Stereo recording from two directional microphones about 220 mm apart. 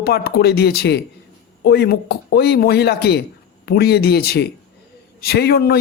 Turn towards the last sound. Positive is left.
turn(degrees=45)  # may be behind; listen again after turning